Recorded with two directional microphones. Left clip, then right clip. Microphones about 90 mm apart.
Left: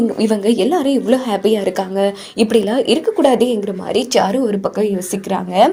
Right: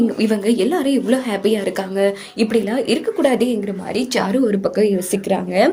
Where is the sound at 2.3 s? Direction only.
50° left (ahead or behind).